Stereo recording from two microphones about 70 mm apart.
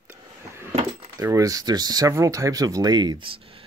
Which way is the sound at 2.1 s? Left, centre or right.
Right.